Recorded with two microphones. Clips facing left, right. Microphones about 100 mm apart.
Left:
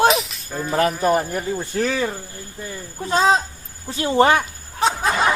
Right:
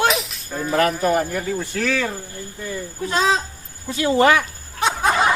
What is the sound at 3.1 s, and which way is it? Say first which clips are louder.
Speech: left 3 dB; 30° left (ahead or behind).